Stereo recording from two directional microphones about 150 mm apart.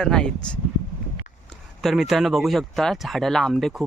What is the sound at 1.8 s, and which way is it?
Speech, centre (ahead or behind).